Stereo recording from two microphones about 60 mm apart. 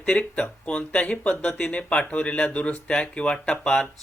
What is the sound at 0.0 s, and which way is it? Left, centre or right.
Speech, centre.